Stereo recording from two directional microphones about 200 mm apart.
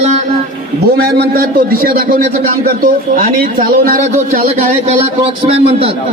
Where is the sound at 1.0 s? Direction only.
50° right (ahead or behind); by 5.9 s 30° right (ahead or behind).